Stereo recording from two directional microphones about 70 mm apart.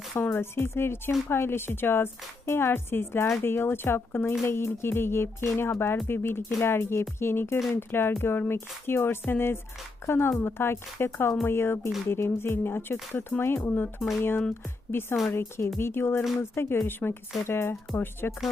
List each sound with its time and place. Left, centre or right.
0.1 s speech: left